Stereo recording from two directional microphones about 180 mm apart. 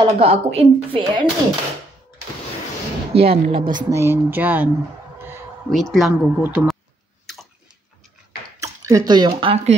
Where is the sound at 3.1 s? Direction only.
30° right (ahead or behind).